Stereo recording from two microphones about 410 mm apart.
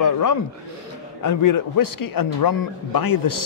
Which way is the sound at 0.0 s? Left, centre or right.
Left.